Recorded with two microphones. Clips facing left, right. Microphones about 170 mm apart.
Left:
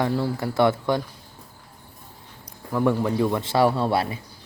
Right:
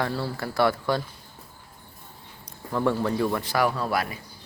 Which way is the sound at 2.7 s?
10° left (ahead or behind).